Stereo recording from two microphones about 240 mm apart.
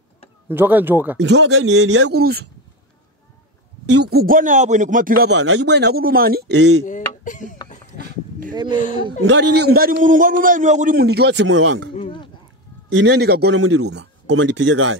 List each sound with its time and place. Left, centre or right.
0.5 s speech: centre
1.3 s a man's voice: right
3.8 s a man's voice: right
7.2 s a sound: left
9.2 s a man's voice: right
11.9 s a sound: left
12.9 s a man's voice: right